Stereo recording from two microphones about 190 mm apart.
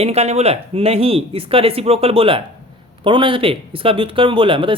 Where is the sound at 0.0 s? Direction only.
35° right (ahead or behind).